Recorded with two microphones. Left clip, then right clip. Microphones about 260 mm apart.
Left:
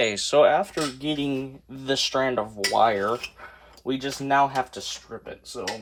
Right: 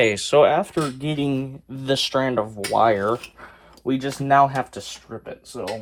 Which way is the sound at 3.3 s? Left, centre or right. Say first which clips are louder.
Right 1 dB; right.